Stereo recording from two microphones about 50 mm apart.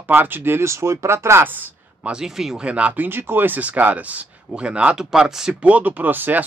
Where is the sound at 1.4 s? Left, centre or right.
Right.